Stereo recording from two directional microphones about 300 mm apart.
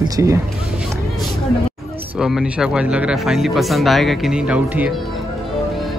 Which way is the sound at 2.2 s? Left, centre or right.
Centre.